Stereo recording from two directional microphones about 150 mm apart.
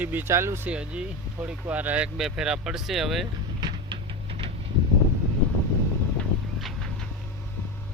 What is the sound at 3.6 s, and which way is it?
Music, 30° right (ahead or behind).